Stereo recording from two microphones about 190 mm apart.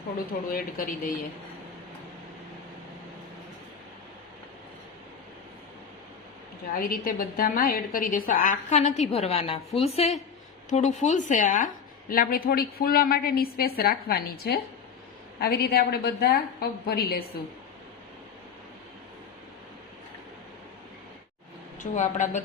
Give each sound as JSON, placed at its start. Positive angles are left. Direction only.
{"t": 0.5, "sound": "a woman's voice", "side_deg": 45}
{"t": 6.7, "sound": "a woman's voice", "side_deg": 50}
{"t": 21.8, "sound": "a woman's voice", "side_deg": 40}